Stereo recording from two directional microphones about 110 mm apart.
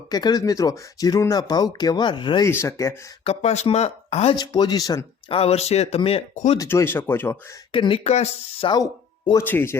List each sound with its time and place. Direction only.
0.1 s speech: 35° left (ahead or behind)
2.4 s speech: 25° left (ahead or behind)
3.2 s speech: 90° left; by 4.4 s 75° left (ahead or behind)
4.4 s speech: 40° left (ahead or behind)
5.3 s speech: 65° left (ahead or behind)
6.0 s speech: 60° left (ahead or behind)
6.6 s speech: 25° left (ahead or behind)
7.7 s speech: 55° left (ahead or behind); by 8.3 s 80° left
8.6 s speech: 50° left (ahead or behind)
9.4 s speech: 20° left (ahead or behind)